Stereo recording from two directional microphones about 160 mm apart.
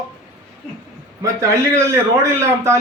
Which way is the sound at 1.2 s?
20° right (ahead or behind).